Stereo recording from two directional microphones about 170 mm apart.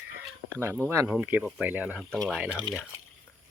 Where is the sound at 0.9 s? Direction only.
10° right (ahead or behind).